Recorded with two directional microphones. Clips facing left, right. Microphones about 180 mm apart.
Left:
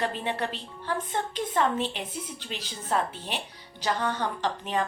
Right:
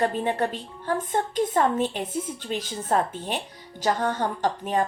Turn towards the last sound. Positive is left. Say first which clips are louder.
# right 4 dB
turn(degrees=-45)  # may be behind; listen again after turning